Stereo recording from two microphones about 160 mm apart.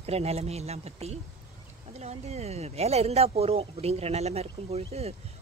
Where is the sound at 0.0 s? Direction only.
40° right (ahead or behind).